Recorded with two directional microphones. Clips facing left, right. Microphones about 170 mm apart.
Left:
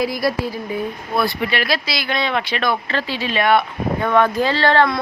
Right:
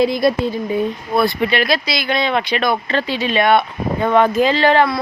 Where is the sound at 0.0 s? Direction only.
25° right (ahead or behind).